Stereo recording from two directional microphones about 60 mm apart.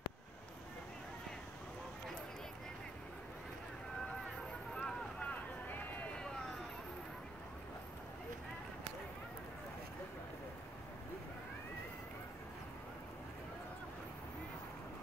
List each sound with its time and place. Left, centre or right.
4.8 s vehicle: centre
5.7 s run: left